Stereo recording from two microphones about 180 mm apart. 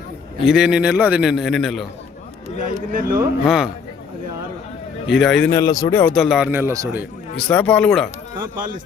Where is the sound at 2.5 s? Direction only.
50° right (ahead or behind).